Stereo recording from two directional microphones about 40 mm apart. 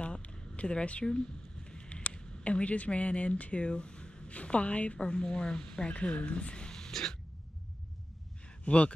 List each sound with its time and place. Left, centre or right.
0.0 s a sound: left
1.0 s speech: left
4.9 s speech: left
6.9 s throat clearing: centre
8.6 s speech: left